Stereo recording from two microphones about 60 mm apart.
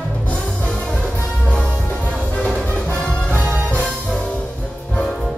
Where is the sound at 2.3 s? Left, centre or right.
Centre.